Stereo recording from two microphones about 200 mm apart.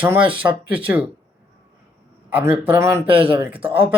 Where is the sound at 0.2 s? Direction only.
25° right (ahead or behind).